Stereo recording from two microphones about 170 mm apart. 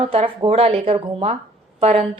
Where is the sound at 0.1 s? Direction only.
35° right (ahead or behind).